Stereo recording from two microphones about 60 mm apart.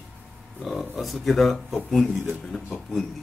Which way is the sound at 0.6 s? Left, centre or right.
Centre.